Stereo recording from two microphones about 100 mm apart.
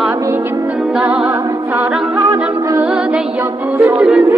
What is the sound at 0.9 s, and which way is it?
Music, 10° right (ahead or behind).